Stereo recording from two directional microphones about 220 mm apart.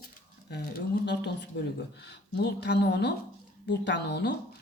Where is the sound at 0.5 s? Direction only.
45° left (ahead or behind).